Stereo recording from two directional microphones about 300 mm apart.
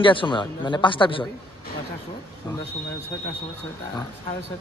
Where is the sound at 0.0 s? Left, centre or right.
Centre.